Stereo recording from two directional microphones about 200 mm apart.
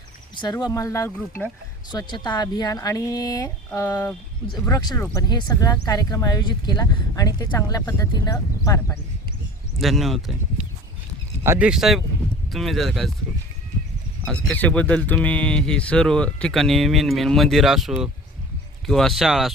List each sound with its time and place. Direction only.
0.3 s speech: 20° left (ahead or behind)
9.7 s speech: centre (ahead or behind)
14.3 s speech: 5° left (ahead or behind)